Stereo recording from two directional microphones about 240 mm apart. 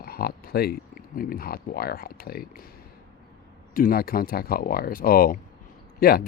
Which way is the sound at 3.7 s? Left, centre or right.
Left.